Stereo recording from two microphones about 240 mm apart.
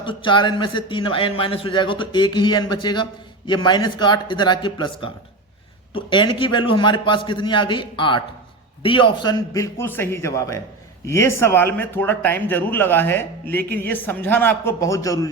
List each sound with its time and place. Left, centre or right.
0.0 s a man's voice: left